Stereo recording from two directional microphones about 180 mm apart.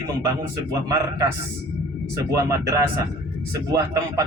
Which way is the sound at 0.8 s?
20° right (ahead or behind).